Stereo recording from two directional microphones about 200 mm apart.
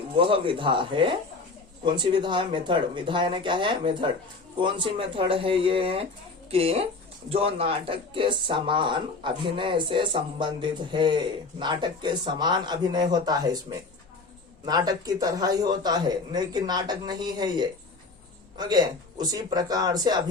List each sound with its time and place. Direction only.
0.2 s speech: 25° right (ahead or behind)